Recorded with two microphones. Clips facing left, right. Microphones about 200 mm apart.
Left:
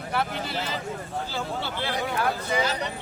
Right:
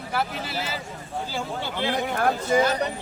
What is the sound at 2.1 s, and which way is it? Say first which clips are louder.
Speech: right 6 dB; 50° right (ahead or behind).